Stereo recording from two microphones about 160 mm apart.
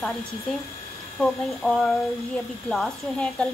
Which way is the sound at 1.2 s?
5° left (ahead or behind).